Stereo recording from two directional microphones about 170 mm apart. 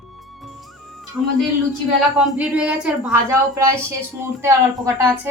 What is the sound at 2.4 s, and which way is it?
Speech, 5° right (ahead or behind).